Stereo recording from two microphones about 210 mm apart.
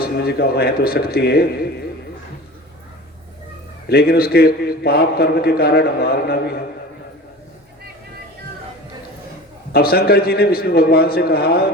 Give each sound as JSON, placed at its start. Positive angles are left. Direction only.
{"t": 0.0, "sound": "a man's voice", "side_deg": 50}
{"t": 3.8, "sound": "a man's voice", "side_deg": 50}
{"t": 9.7, "sound": "a man's voice", "side_deg": 45}